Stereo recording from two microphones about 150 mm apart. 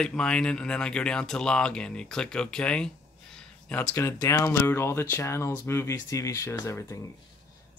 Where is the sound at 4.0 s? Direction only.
20° left (ahead or behind).